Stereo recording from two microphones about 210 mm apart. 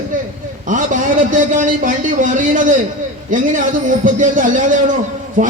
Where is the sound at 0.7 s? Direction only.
40° right (ahead or behind).